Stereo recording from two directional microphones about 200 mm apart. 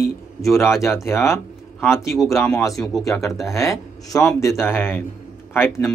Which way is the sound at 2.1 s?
Centre (ahead or behind).